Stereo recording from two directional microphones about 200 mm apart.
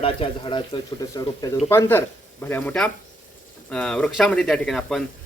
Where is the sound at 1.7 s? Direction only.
10° left (ahead or behind).